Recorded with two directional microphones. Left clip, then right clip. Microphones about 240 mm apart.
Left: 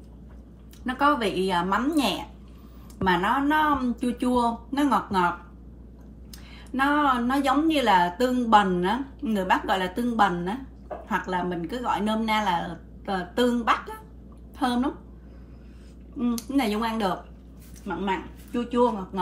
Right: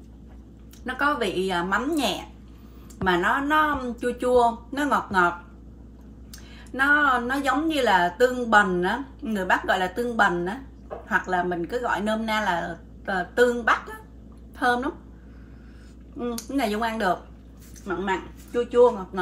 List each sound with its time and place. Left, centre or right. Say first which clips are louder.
0.8 s a woman's voice: left 1 dB; centre
6.3 s a woman's voice: right 1 dB; centre
16.2 s a woman's voice: even; centre